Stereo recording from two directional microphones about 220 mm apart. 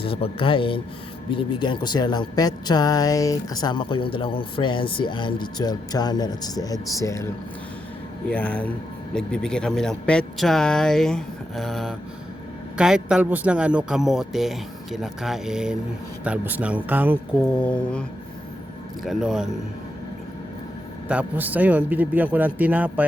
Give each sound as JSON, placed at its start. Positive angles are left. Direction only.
{"t": 0.0, "sound": "speech", "side_deg": 25}
{"t": 8.3, "sound": "a man's voice", "side_deg": 5}
{"t": 17.6, "sound": "a man's voice", "side_deg": 5}
{"t": 19.0, "sound": "a man's voice", "side_deg": 0}
{"t": 21.1, "sound": "a man's voice", "side_deg": -5}